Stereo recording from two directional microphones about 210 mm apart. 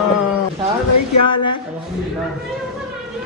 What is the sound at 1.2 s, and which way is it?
Speech, 25° left (ahead or behind).